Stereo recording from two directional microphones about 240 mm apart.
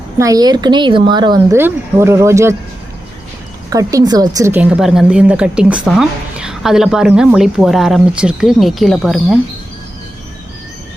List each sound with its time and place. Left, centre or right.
0.2 s speech: centre
3.7 s a woman's voice: centre